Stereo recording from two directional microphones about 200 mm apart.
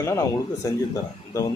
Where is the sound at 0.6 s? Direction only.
15° left (ahead or behind).